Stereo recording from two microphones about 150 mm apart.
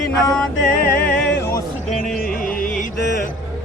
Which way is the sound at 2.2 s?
75° left (ahead or behind).